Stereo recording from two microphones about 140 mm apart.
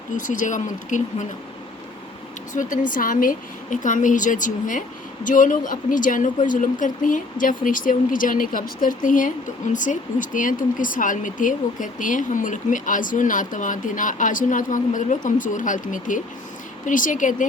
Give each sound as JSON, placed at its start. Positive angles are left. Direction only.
{"t": 0.2, "sound": "speech", "side_deg": 65}
{"t": 2.5, "sound": "a woman's voice", "side_deg": 65}
{"t": 2.9, "sound": "a woman's voice", "side_deg": 80}